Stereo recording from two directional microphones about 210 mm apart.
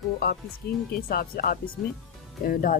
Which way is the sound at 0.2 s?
50° left (ahead or behind).